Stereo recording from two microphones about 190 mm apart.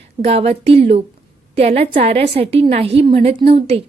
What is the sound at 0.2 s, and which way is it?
A woman's voice, 30° right (ahead or behind).